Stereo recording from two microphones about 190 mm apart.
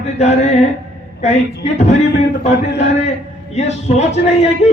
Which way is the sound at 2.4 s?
35° left (ahead or behind).